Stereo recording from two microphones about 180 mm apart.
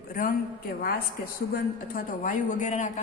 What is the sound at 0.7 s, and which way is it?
A woman's voice, 55° left (ahead or behind).